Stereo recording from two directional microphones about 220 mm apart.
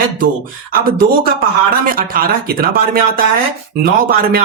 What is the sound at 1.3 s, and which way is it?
Speech, 40° right (ahead or behind).